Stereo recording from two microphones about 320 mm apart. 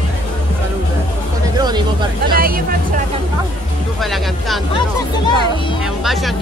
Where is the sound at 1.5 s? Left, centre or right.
Centre.